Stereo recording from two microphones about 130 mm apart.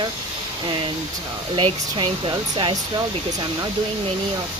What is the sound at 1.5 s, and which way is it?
Speech, 40° right (ahead or behind).